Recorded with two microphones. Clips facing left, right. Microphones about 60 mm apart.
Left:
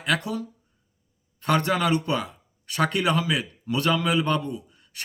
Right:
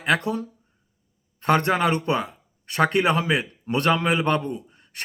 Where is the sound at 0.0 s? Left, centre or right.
Right.